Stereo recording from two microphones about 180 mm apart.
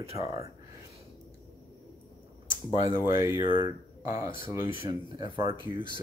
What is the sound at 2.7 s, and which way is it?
Speech, 20° right (ahead or behind).